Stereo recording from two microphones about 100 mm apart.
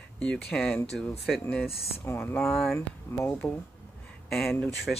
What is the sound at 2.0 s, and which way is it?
Speech, 25° left (ahead or behind).